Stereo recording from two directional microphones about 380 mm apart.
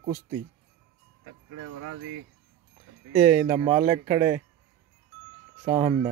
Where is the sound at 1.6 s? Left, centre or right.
Right.